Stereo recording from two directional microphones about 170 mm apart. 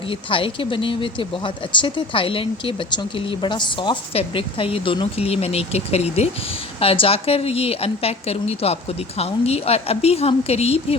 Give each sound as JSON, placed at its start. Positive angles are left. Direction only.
{"t": 0.1, "sound": "speech", "side_deg": 30}